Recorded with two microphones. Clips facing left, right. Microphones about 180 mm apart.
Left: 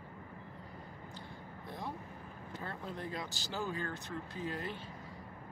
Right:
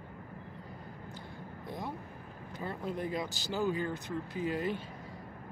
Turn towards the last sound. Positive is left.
turn(degrees=-15)  # may be behind; listen again after turning